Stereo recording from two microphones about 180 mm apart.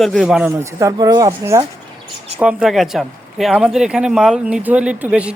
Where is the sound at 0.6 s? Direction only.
15° right (ahead or behind).